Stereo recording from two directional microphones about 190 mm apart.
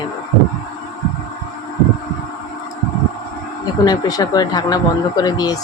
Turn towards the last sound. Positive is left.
turn(degrees=20)  # may be behind; listen again after turning